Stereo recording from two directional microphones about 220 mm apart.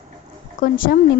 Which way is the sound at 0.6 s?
40° left (ahead or behind).